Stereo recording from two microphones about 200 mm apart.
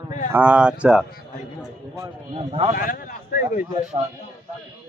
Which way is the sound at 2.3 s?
30° right (ahead or behind).